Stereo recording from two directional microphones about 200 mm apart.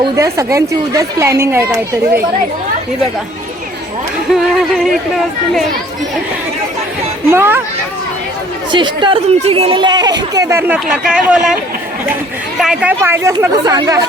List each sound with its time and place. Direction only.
0.0 s speech: 15° right (ahead or behind)
7.3 s speech: 10° right (ahead or behind)
8.7 s speech: 25° right (ahead or behind); by 11.5 s 5° right (ahead or behind)
12.5 s speech: 5° right (ahead or behind)